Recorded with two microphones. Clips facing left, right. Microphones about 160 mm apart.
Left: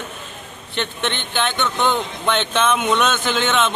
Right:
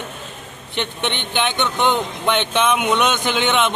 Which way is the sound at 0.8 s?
15° right (ahead or behind).